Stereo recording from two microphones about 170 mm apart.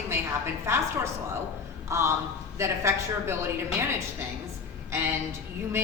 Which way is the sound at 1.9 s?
15° right (ahead or behind).